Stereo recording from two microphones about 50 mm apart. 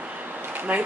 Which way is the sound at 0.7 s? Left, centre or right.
Right.